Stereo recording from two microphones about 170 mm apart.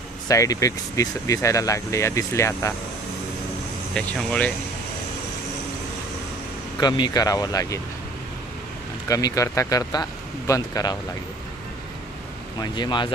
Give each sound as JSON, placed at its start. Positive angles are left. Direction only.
{"t": 0.3, "sound": "speech", "side_deg": 20}
{"t": 3.9, "sound": "speech", "side_deg": 5}
{"t": 6.7, "sound": "speech", "side_deg": 25}
{"t": 9.0, "sound": "speech", "side_deg": 20}
{"t": 12.5, "sound": "speech", "side_deg": 25}